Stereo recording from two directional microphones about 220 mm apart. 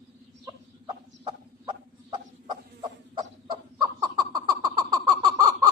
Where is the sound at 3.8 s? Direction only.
20° right (ahead or behind).